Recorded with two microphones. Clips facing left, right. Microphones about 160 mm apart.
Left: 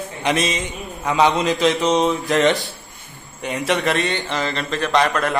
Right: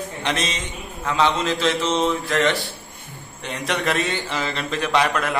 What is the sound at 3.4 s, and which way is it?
Speech, 5° left (ahead or behind).